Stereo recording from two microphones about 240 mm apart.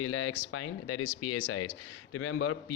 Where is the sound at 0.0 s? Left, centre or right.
Left.